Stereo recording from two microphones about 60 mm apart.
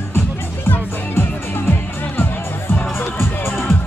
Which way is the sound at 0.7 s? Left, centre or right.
Left.